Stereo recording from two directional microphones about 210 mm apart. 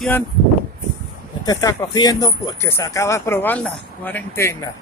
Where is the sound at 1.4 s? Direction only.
15° left (ahead or behind).